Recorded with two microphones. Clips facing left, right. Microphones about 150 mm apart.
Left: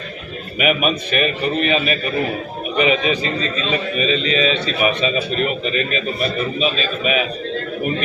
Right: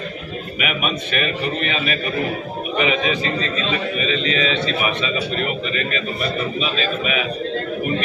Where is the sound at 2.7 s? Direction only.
20° left (ahead or behind).